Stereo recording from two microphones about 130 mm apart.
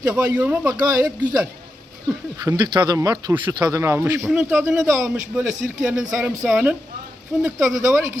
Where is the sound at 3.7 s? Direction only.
20° right (ahead or behind).